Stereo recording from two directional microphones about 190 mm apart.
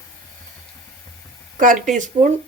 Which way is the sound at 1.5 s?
45° right (ahead or behind).